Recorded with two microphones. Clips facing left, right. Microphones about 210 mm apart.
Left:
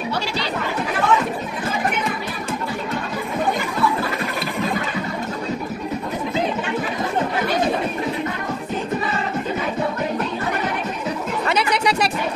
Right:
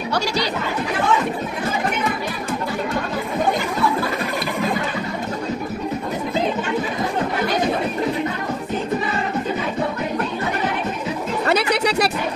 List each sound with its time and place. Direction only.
11.4 s chatter: 40° right (ahead or behind)